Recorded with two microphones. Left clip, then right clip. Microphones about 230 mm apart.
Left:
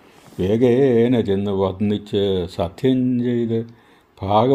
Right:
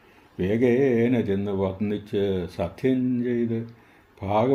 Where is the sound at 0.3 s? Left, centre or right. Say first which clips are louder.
Left 5 dB; left.